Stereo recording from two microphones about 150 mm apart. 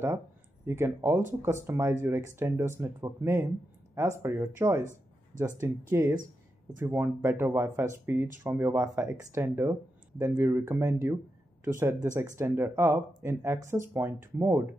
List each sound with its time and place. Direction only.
0.7 s speech: 15° right (ahead or behind)